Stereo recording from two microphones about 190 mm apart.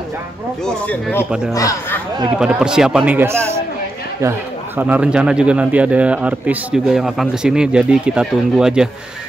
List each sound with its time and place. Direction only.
0.7 s speech: 5° left (ahead or behind)
1.5 s speech: 15° left (ahead or behind)
2.3 s speech: 5° right (ahead or behind)